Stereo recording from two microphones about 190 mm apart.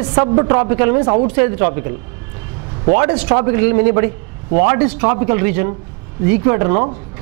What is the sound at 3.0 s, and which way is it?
A man's voice, 10° right (ahead or behind).